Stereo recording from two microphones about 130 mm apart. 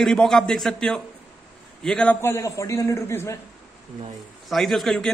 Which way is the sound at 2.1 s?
20° left (ahead or behind).